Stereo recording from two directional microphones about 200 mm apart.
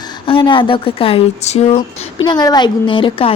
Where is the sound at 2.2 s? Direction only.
20° left (ahead or behind).